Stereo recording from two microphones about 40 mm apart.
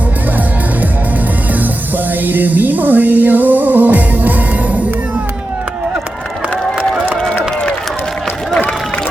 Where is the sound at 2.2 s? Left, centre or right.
Right.